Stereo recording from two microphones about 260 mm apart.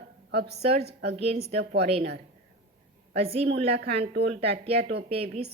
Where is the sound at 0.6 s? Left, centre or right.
Right.